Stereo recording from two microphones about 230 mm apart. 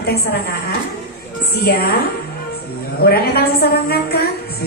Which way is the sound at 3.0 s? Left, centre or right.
Left.